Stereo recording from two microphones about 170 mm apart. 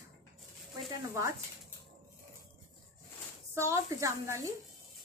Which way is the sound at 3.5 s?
20° right (ahead or behind).